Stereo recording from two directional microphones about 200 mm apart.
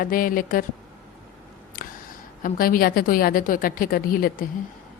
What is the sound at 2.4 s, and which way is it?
A woman's voice, 45° left (ahead or behind).